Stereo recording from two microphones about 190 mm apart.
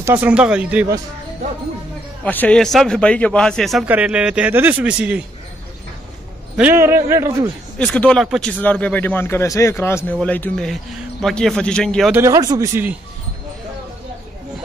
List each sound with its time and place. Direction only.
0.0 s a man's voice: 10° right (ahead or behind)
2.2 s a man's voice: 5° left (ahead or behind)
6.5 s a man's voice: 10° right (ahead or behind)
7.8 s a man's voice: 5° left (ahead or behind)
12.1 s a man's voice: 15° right (ahead or behind)